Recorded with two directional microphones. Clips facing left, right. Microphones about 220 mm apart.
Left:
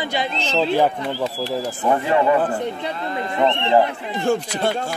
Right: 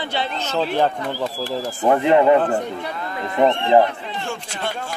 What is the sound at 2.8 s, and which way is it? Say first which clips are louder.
Speech: left 2 dB; 25° left (ahead or behind).